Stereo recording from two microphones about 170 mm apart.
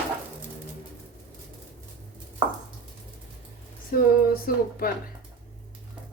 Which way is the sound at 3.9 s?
55° left (ahead or behind).